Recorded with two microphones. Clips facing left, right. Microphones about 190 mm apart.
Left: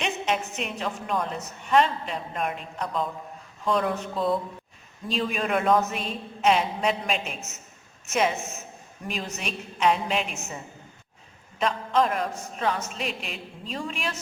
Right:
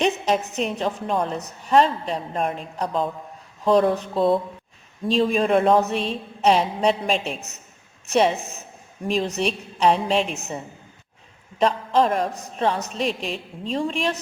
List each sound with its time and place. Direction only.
0.0 s a woman's voice: 35° right (ahead or behind)
11.6 s a woman's voice: 35° right (ahead or behind)